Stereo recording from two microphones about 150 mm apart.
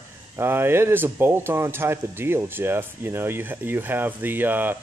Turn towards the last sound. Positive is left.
turn(degrees=-15)  # may be behind; listen again after turning